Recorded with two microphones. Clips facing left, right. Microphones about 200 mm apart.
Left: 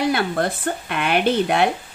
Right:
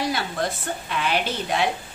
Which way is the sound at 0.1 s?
55° left (ahead or behind).